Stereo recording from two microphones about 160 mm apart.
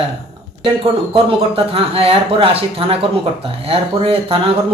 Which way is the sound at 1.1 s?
35° right (ahead or behind).